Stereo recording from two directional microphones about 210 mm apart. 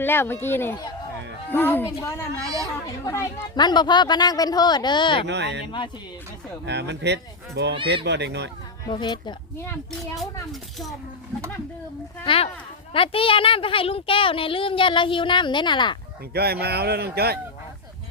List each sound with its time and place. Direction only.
0.0 s a child's voice: 10° left (ahead or behind)
5.2 s speech: 55° right (ahead or behind)
6.7 s speech: 55° right (ahead or behind)
8.9 s a child's voice: 20° left (ahead or behind)
12.2 s a child's voice: 25° left (ahead or behind)
16.3 s speech: 50° right (ahead or behind)